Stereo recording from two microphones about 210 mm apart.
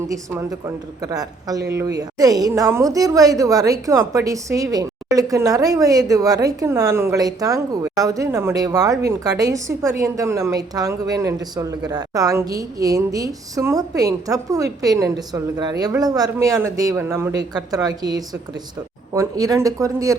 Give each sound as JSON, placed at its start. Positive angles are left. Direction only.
{"t": 1.0, "sound": "a woman's voice", "side_deg": -15}